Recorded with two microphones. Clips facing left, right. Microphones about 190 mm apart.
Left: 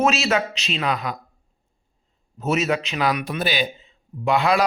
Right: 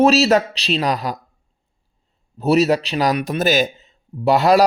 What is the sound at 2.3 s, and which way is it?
Speech, 35° right (ahead or behind).